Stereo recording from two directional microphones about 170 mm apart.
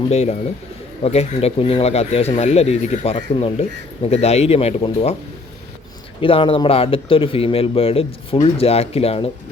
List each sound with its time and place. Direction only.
0.1 s speech: 40° left (ahead or behind)
6.1 s speech: 30° left (ahead or behind)